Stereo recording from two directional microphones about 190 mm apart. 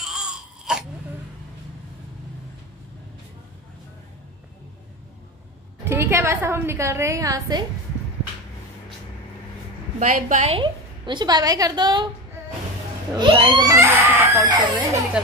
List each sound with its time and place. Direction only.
0.0 s a sound: centre (ahead or behind)
5.9 s a woman's voice: 10° right (ahead or behind)
9.9 s a woman's voice: 45° right (ahead or behind); by 12.1 s 25° right (ahead or behind)
13.2 s speech: 25° right (ahead or behind)
14.8 s a woman's voice: 10° right (ahead or behind)